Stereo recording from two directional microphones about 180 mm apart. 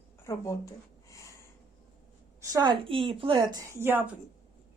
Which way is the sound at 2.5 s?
25° right (ahead or behind).